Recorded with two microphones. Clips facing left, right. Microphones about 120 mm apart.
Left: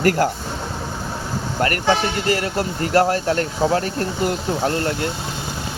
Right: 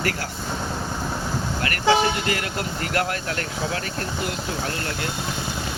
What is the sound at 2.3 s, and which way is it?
Speech, 35° left (ahead or behind).